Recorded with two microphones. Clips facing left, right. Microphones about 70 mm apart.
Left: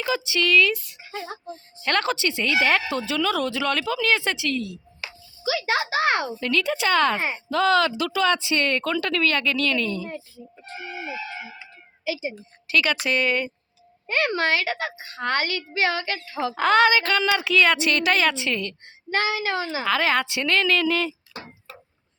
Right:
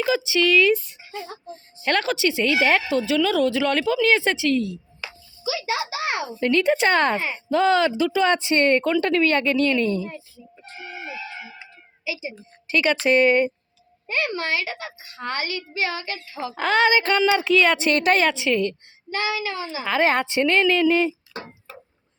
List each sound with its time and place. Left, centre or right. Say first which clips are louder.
0.3 s speech: right 1 dB; centre
1.8 s a woman's voice: right 2 dB; centre
5.6 s a sound: left 5 dB; left
6.6 s a woman's voice: right 2 dB; right
7.2 s speech: left 1 dB; left
7.5 s speech: right 2 dB; right
12.7 s speech: right 4 dB; right
14.3 s a woman's voice: left 3 dB; left
16.6 s speech: left 1 dB; centre; by 18.3 s right
18.3 s a woman's voice: right 4 dB; centre
19.1 s speech: left 2 dB; left
19.8 s speech: right 3 dB; right
20.1 s speech: right 3 dB; right